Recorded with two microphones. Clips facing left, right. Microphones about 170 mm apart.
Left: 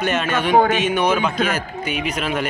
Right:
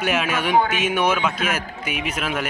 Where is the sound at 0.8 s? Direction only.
5° right (ahead or behind).